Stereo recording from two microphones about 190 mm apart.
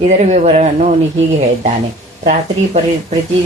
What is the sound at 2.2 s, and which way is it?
Speech, 35° right (ahead or behind).